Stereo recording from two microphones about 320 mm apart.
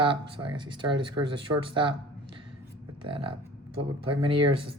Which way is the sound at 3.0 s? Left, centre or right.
Centre.